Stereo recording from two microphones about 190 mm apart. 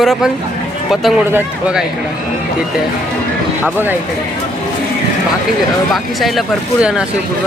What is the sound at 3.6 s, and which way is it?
Speech, 10° right (ahead or behind).